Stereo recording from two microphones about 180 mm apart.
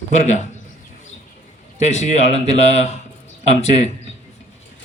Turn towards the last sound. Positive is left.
turn(degrees=35)  # may be behind; listen again after turning